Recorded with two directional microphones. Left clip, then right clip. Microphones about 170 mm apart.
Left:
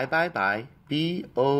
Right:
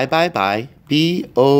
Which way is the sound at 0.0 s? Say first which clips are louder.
Right 8 dB; 35° right (ahead or behind).